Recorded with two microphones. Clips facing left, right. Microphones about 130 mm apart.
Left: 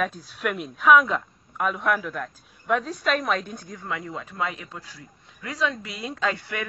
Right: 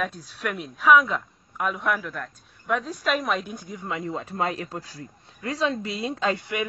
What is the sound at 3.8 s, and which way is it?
A man's voice, 25° right (ahead or behind).